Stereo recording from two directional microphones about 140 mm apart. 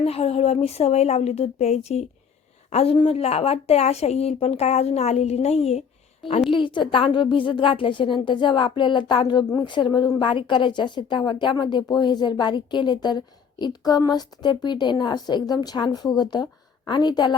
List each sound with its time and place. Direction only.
0.0 s a woman's voice: 45° left (ahead or behind)
6.5 s a woman's voice: 35° left (ahead or behind)